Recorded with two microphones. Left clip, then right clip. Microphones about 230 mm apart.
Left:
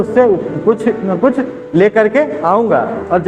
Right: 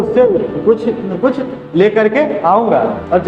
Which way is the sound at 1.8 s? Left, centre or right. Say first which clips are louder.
Even; left.